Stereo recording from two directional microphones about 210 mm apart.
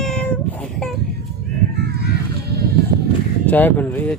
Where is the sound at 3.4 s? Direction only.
10° left (ahead or behind).